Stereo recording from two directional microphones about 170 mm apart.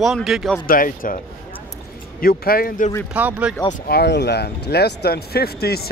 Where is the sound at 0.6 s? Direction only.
55° left (ahead or behind).